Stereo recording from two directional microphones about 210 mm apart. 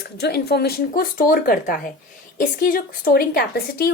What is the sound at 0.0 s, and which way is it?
Speech, 50° left (ahead or behind).